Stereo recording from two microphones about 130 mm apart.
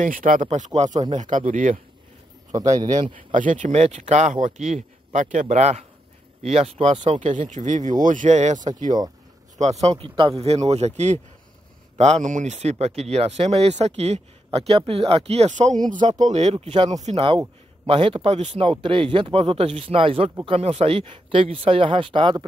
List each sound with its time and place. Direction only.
0.0 s speech: 90° right
3.3 s speech: 80° right; by 7.3 s 55° right (ahead or behind)
7.3 s speech: 70° right (ahead or behind)
8.0 s speech: 80° right; by 8.5 s 65° right (ahead or behind)
9.6 s speech: 55° right (ahead or behind)
15.9 s speech: 70° right (ahead or behind); by 16.9 s 45° right (ahead or behind)
16.9 s speech: 60° right (ahead or behind)
17.8 s speech: 45° right (ahead or behind)
18.7 s speech: 40° right (ahead or behind)